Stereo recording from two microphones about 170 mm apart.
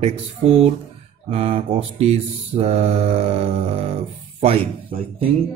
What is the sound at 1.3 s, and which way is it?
Mantra, 35° right (ahead or behind).